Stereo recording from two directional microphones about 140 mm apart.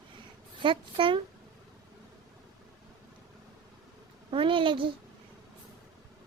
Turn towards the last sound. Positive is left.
turn(degrees=-35)  # may be behind; listen again after turning